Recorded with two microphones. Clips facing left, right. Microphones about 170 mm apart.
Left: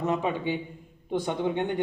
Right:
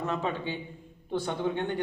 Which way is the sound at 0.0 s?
15° left (ahead or behind).